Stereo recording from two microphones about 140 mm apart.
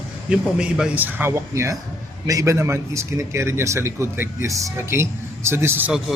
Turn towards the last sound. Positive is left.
turn(degrees=-10)  # may be behind; listen again after turning